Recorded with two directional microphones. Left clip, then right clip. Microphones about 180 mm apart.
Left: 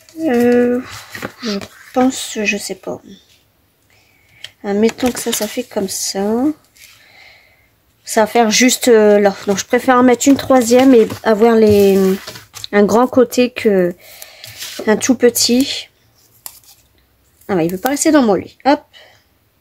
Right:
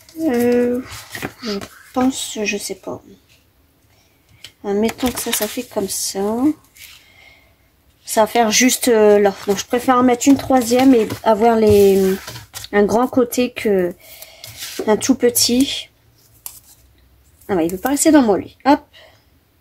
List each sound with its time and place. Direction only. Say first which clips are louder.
0.2 s a sound: left 3 dB; 40° left (ahead or behind)
2.0 s speech: left 3 dB; 40° left (ahead or behind)
4.6 s speech: left 4 dB; 35° left (ahead or behind)
8.0 s speech: left 2 dB; 35° left (ahead or behind)
17.5 s speech: left 2 dB; 30° left (ahead or behind)